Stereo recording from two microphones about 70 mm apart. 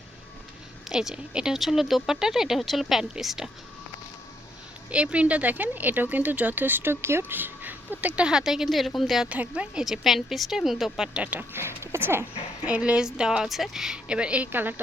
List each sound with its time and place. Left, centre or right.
0.9 s speech: centre
1.5 s a woman's voice: centre
4.9 s a woman's voice: centre
9.3 s speech: centre
9.8 s a woman's voice: centre
11.5 s speech: right
12.6 s speech: centre
14.5 s speech: right